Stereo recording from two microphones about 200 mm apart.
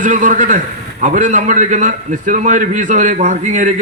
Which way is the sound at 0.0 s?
40° right (ahead or behind).